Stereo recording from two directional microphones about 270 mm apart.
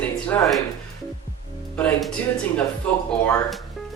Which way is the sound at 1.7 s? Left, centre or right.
Centre.